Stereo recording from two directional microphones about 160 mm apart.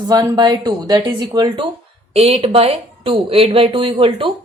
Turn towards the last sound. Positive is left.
turn(degrees=-35)  # may be behind; listen again after turning